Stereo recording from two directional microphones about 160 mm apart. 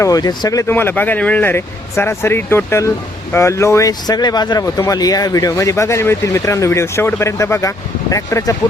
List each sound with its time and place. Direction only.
0.0 s speech: 25° left (ahead or behind)